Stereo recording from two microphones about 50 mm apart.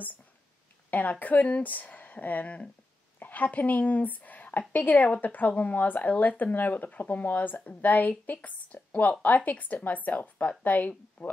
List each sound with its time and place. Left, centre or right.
0.8 s a woman's voice: left